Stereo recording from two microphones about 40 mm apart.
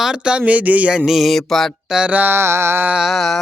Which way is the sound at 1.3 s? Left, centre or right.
Centre.